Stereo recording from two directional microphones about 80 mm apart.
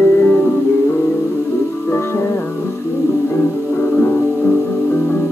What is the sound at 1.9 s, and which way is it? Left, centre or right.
Music, left.